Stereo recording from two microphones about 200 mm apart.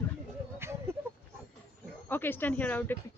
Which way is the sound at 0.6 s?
10° right (ahead or behind).